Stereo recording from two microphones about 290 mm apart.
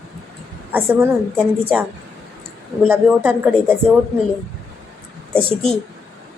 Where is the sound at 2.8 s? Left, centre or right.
Centre.